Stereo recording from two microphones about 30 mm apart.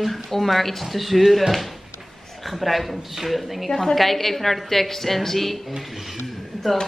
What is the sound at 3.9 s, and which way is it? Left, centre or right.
A woman's voice, centre.